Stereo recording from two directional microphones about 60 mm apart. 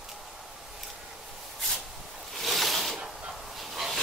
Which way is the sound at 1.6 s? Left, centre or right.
Centre.